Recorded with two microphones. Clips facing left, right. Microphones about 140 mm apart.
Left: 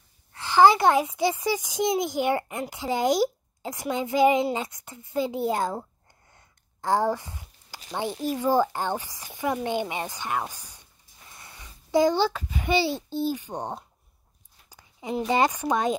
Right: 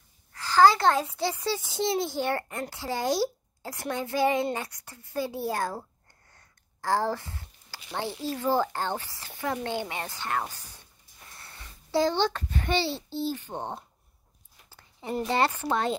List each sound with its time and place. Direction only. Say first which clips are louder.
0.3 s a woman's voice: left 2 dB; 20° left (ahead or behind)
14.7 s a sound: left 2 dB; 15° left (ahead or behind)
15.2 s speech: left 3 dB; 15° left (ahead or behind)